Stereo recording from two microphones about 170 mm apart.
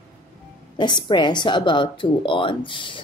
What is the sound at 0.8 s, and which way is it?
Speech, 25° left (ahead or behind).